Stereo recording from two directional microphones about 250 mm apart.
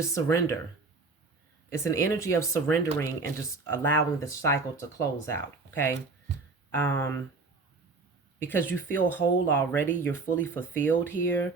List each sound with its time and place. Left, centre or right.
0.1 s speech: centre
1.7 s speech: centre
8.4 s speech: centre